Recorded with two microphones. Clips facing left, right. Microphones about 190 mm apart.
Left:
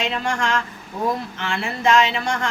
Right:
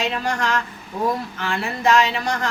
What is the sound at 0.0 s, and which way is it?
Speech, 25° left (ahead or behind).